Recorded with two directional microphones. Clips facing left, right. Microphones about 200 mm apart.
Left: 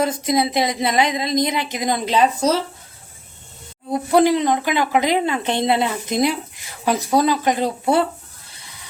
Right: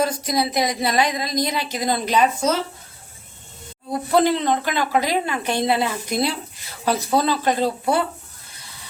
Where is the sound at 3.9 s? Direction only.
15° left (ahead or behind).